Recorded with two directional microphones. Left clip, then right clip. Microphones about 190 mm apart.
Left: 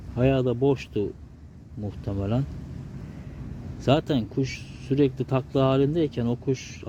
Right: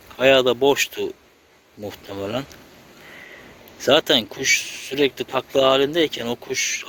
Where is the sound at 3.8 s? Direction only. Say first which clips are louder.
Right 7 dB; 5° right (ahead or behind).